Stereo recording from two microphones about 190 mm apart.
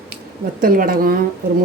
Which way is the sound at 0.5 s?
50° right (ahead or behind).